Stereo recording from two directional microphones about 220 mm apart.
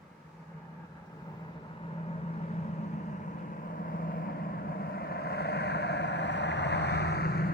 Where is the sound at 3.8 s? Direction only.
40° left (ahead or behind).